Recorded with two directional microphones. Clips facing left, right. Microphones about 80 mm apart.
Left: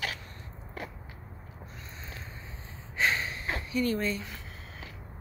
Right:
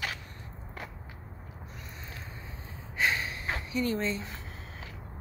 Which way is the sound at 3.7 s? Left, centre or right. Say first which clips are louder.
Left 1 dB; centre.